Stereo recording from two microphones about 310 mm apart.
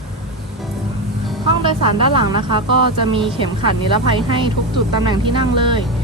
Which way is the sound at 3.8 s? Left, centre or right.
Centre.